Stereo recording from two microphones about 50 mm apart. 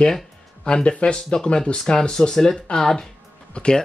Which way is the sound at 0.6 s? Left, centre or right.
Left.